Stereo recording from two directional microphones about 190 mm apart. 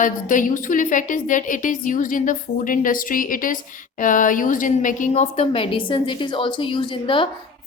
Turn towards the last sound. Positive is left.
turn(degrees=25)  # may be behind; listen again after turning